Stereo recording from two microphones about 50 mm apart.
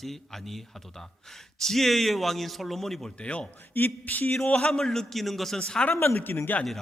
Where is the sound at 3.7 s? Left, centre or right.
Left.